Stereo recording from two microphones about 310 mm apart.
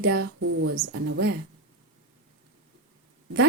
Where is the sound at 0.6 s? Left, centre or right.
Right.